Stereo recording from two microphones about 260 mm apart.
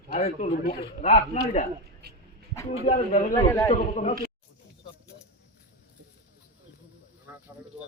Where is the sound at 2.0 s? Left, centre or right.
Right.